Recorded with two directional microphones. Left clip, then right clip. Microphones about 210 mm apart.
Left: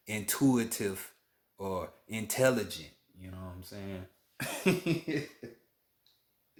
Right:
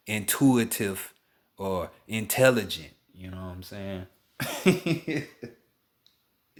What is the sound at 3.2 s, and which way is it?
Cough, 45° right (ahead or behind).